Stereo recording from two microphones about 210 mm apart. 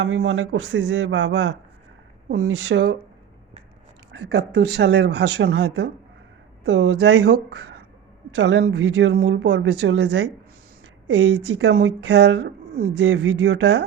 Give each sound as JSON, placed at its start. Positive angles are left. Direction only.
{"t": 0.0, "sound": "a woman's voice", "side_deg": -60}
{"t": 4.1, "sound": "a woman's voice", "side_deg": -55}
{"t": 8.4, "sound": "a woman's voice", "side_deg": -60}
{"t": 11.2, "sound": "a woman's voice", "side_deg": -55}